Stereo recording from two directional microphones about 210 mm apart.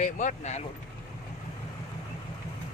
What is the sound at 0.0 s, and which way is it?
Speech, 35° left (ahead or behind).